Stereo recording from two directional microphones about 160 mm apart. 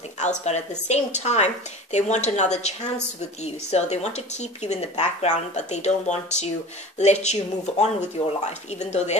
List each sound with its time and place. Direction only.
0.5 s speech: 45° left (ahead or behind)